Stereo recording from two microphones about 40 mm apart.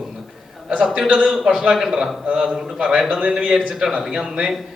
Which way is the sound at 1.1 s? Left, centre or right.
Centre.